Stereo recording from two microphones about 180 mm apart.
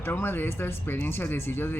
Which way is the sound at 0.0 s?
15° left (ahead or behind).